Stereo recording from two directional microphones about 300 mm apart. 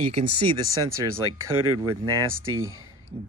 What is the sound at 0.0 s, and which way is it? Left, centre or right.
Speech, right.